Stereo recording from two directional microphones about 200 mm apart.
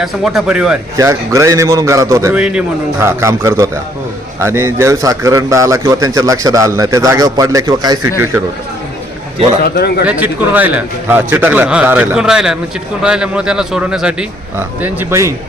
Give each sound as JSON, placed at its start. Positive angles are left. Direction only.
{"t": 0.0, "sound": "speech", "side_deg": -5}
{"t": 0.9, "sound": "a man's voice", "side_deg": -15}
{"t": 9.6, "sound": "a man's voice", "side_deg": 50}
{"t": 10.1, "sound": "a man's voice", "side_deg": -10}